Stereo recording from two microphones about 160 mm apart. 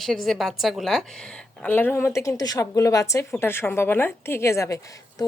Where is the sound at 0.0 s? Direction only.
Centre (ahead or behind).